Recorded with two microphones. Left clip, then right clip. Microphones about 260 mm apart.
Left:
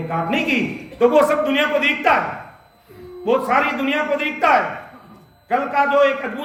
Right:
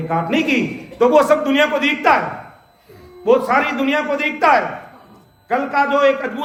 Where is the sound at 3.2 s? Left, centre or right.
Centre.